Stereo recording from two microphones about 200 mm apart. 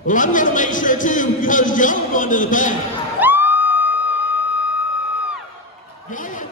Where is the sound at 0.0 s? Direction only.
40° left (ahead or behind).